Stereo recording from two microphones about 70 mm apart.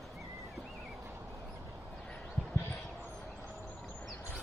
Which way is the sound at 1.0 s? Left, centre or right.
Right.